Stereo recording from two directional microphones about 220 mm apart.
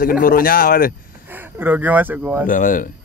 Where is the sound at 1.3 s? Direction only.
10° right (ahead or behind).